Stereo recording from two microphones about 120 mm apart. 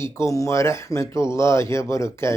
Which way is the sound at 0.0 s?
25° left (ahead or behind).